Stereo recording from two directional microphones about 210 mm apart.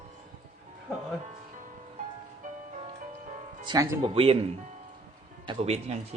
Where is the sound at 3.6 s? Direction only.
15° right (ahead or behind).